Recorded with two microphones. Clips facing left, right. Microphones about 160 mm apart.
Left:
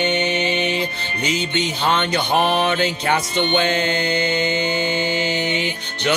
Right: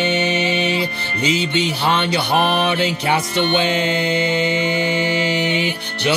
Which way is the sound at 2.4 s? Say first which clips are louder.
Even; 15° left (ahead or behind).